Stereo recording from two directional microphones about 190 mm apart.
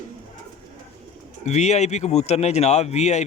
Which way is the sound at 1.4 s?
35° left (ahead or behind).